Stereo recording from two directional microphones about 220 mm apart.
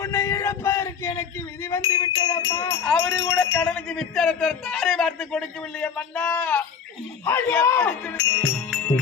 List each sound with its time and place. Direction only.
0.0 s a sound: 10° left (ahead or behind)
1.6 s speech: 15° left (ahead or behind)
2.8 s a man's voice: centre (ahead or behind)